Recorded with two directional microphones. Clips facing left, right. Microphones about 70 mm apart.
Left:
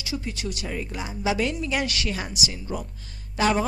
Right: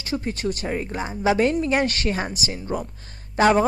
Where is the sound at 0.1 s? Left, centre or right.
Right.